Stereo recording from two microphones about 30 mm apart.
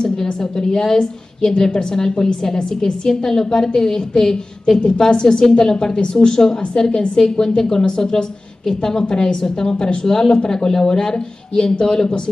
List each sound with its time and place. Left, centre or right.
0.3 s a woman's voice: left
4.7 s a woman's voice: left
7.2 s a woman's voice: left